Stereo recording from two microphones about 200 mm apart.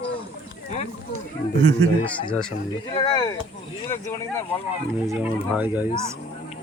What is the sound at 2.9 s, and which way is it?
Speech, 25° left (ahead or behind).